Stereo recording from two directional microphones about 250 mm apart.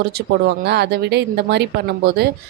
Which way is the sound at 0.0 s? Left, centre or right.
Right.